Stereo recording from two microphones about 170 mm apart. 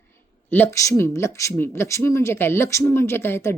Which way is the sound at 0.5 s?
15° left (ahead or behind).